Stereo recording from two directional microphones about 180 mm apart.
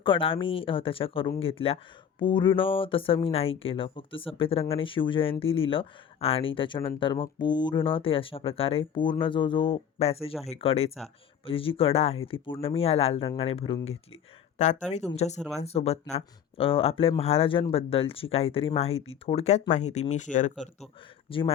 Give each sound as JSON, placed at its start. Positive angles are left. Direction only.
{"t": 0.0, "sound": "speech", "side_deg": 30}
{"t": 14.8, "sound": "speech", "side_deg": 40}
{"t": 21.2, "sound": "speech", "side_deg": 30}